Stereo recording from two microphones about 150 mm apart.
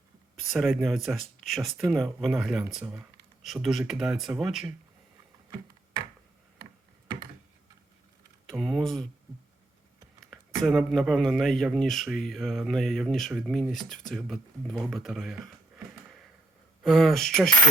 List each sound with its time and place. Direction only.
0.4 s speech: centre (ahead or behind)
8.4 s speech: centre (ahead or behind)
10.6 s speech: centre (ahead or behind)
16.8 s speech: centre (ahead or behind)